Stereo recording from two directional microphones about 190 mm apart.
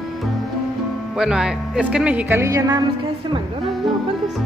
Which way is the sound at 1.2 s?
5° right (ahead or behind).